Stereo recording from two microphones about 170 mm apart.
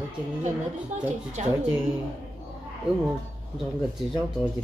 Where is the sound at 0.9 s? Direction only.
45° right (ahead or behind).